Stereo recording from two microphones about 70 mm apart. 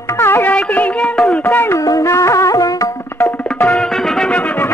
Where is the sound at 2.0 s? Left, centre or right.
Left.